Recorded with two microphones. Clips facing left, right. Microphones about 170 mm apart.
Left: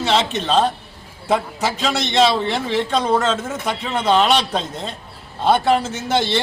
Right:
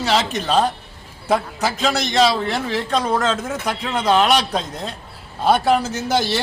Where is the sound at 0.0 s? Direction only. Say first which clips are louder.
Left 1 dB; 5° right (ahead or behind).